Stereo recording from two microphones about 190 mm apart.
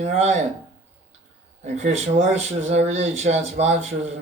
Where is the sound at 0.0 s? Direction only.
35° right (ahead or behind).